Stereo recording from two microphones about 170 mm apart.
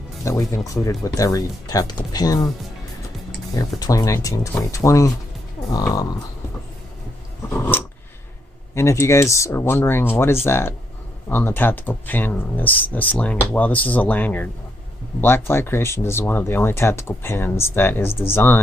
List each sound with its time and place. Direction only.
0.2 s speech: 15° left (ahead or behind)
3.5 s speech: 20° left (ahead or behind)
7.5 s scissors: 10° left (ahead or behind)
8.7 s speech: 15° left (ahead or behind)